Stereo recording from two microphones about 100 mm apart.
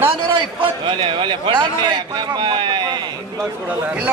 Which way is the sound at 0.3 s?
55° right (ahead or behind).